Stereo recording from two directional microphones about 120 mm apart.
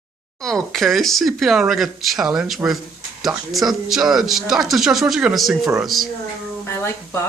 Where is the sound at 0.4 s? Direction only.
Centre (ahead or behind).